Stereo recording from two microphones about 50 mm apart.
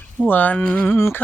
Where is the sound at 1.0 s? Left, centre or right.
Left.